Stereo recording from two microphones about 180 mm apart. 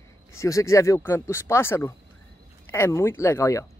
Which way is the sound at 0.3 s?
15° left (ahead or behind).